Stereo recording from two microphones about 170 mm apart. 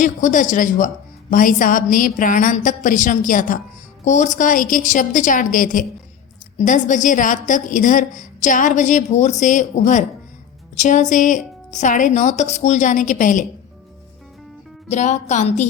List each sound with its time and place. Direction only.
0.0 s a woman's voice: 50° left (ahead or behind)
14.8 s a woman's voice: 45° left (ahead or behind)